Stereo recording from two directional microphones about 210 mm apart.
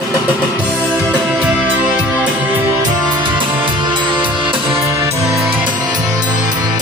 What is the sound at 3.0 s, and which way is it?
Music, 20° right (ahead or behind).